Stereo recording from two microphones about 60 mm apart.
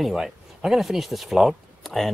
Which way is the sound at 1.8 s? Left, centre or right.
Centre.